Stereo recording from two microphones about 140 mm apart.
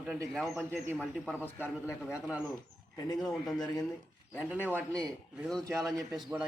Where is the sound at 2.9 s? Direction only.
30° left (ahead or behind).